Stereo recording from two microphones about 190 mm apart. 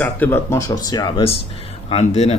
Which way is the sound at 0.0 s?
10° left (ahead or behind).